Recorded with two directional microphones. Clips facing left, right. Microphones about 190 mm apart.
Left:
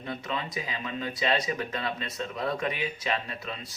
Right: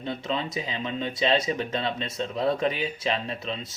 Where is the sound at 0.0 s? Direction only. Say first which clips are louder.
Right 4 dB; 25° right (ahead or behind).